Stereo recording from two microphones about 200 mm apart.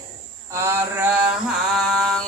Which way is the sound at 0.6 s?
10° right (ahead or behind).